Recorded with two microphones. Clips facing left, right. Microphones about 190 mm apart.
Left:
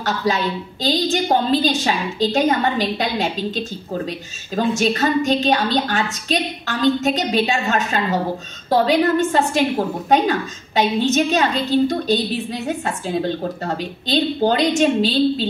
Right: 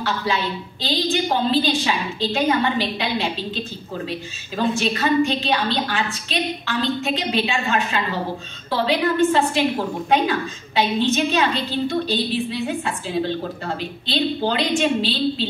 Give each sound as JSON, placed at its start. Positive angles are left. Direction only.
{"t": 0.0, "sound": "a woman's voice", "side_deg": 40}